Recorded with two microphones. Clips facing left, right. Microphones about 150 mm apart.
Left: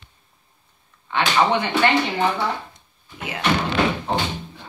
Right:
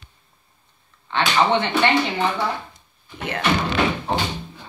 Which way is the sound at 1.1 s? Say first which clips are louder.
Even; 10° left (ahead or behind).